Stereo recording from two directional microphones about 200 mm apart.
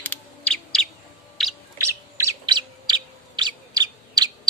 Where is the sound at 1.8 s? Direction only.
15° right (ahead or behind).